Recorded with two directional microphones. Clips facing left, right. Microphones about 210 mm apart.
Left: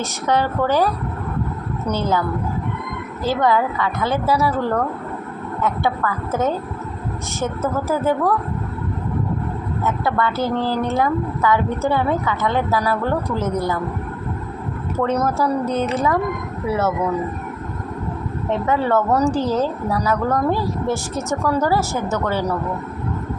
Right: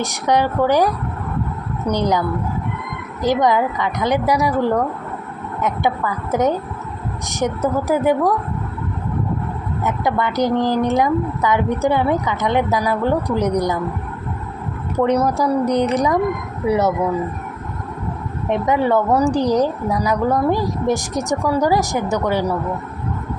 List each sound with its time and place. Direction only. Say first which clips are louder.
0.0 s a woman's voice: right 2 dB; 15° right (ahead or behind)
3.2 s a woman's voice: right 2 dB; 15° right (ahead or behind)
9.8 s a woman's voice: right 1 dB; 15° right (ahead or behind)
14.9 s a woman's voice: right 3 dB; 15° right (ahead or behind)
18.4 s a woman's voice: right 2 dB; 15° right (ahead or behind)